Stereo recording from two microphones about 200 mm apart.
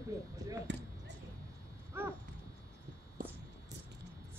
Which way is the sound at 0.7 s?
65° right (ahead or behind).